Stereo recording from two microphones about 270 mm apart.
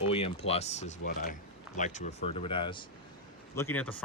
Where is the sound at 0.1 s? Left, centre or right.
Left.